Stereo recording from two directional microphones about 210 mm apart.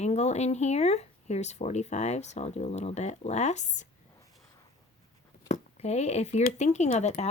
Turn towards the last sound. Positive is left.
turn(degrees=30)  # may be behind; listen again after turning